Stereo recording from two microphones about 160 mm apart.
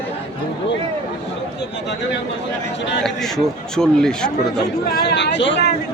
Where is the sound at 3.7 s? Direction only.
5° left (ahead or behind).